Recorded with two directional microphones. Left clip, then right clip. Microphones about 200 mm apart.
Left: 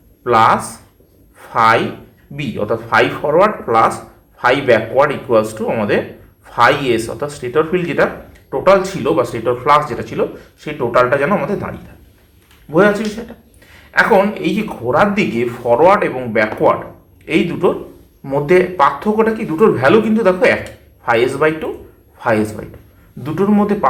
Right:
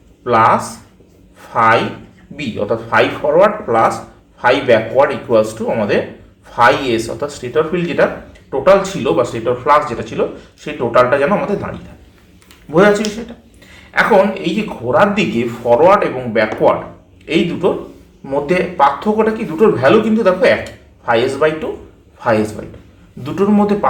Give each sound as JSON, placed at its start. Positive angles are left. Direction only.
{"t": 0.3, "sound": "speech", "side_deg": 30}
{"t": 1.4, "sound": "a sound", "side_deg": 30}
{"t": 2.3, "sound": "speech", "side_deg": 30}
{"t": 12.7, "sound": "a woman's voice", "side_deg": 10}
{"t": 14.4, "sound": "speech", "side_deg": 30}
{"t": 23.2, "sound": "speech", "side_deg": 25}